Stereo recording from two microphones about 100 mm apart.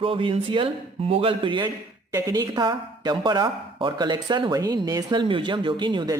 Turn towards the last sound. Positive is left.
turn(degrees=-50)  # may be behind; listen again after turning